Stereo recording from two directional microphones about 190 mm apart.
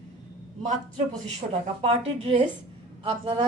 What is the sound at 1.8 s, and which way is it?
A woman's voice, 30° right (ahead or behind).